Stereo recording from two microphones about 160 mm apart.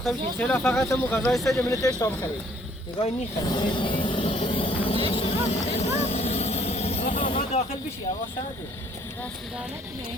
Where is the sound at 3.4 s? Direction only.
25° left (ahead or behind).